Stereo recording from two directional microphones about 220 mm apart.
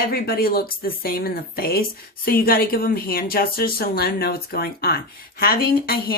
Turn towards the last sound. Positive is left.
turn(degrees=45)  # may be behind; listen again after turning